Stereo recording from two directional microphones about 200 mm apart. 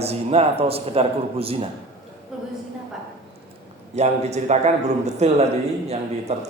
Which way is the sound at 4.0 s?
35° right (ahead or behind).